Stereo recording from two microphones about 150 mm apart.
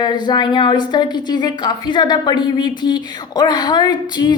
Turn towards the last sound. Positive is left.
turn(degrees=30)  # may be behind; listen again after turning